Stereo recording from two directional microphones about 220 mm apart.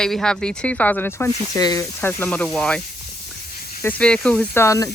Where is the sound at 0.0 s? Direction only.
5° left (ahead or behind).